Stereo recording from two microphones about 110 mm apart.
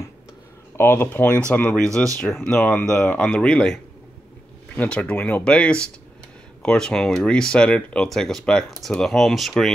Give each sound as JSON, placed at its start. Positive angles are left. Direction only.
{"t": 0.7, "sound": "speech", "side_deg": 15}